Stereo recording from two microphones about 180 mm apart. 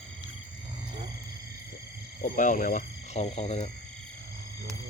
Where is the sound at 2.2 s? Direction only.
45° left (ahead or behind).